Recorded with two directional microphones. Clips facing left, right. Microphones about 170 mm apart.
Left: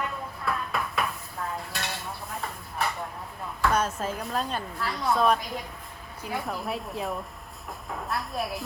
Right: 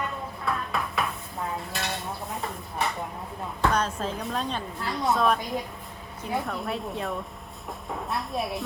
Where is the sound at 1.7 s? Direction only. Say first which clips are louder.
Right 3 dB; centre (ahead or behind).